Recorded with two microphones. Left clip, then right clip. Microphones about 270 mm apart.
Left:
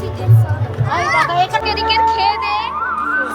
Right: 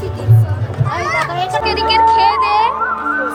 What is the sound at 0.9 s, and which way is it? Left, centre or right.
Children playing, left.